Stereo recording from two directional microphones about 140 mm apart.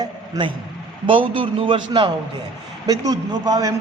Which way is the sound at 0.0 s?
35° right (ahead or behind).